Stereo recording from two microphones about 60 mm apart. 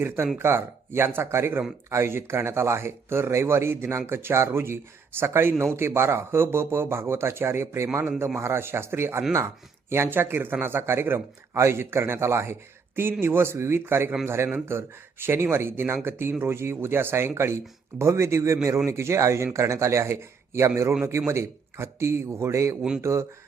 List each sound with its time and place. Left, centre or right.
0.3 s speech: right